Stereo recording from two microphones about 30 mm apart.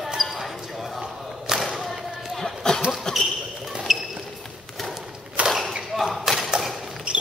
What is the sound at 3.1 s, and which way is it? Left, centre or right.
Basketball bounce, left.